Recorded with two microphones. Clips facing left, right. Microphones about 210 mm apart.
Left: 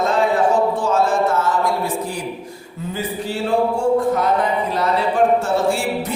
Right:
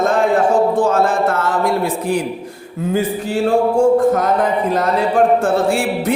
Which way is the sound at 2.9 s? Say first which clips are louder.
Right 6 dB; 50° right (ahead or behind).